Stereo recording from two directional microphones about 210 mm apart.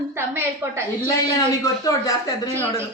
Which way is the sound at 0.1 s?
10° right (ahead or behind).